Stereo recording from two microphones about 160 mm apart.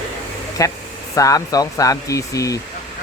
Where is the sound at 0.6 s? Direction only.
20° left (ahead or behind).